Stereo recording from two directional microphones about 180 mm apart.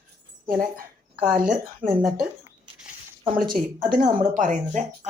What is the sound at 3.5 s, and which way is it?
A woman's voice, 50° right (ahead or behind).